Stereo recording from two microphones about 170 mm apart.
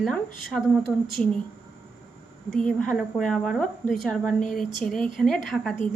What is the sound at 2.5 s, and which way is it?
A woman's voice, 5° left (ahead or behind).